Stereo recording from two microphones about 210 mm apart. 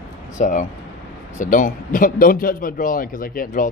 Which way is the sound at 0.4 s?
35° left (ahead or behind).